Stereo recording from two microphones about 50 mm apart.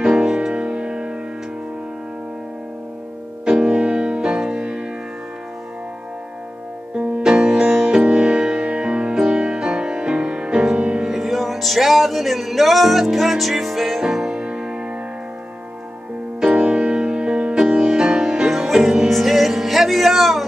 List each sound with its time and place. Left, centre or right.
0.0 s music: centre
3.4 s music: centre
7.2 s music: centre
11.1 s music: centre
14.4 s music: right
16.4 s music: right; by 20.4 s centre